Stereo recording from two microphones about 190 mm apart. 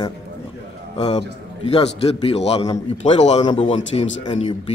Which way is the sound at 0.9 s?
30° left (ahead or behind).